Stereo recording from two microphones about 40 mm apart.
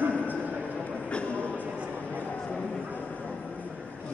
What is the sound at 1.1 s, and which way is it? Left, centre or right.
Train, left.